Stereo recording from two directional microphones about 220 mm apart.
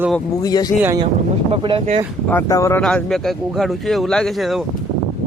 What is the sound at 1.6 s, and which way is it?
Speech, 25° right (ahead or behind).